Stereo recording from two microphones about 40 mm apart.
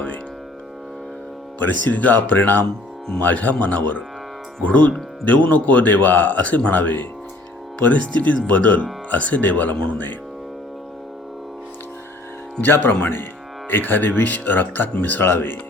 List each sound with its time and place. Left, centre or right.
1.5 s speech: left
7.9 s speech: left
12.6 s speech: left
15.2 s speech: left